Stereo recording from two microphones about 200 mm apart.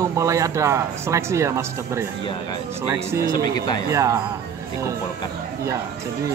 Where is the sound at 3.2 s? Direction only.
20° left (ahead or behind).